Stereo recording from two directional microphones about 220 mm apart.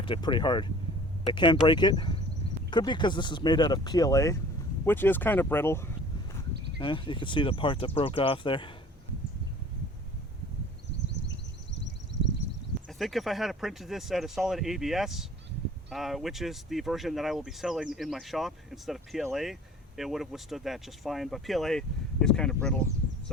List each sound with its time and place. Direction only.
0.0 s speech: 20° left (ahead or behind)
6.7 s speech: 20° left (ahead or behind)
11.1 s a sound: 50° left (ahead or behind)
13.0 s speech: centre (ahead or behind)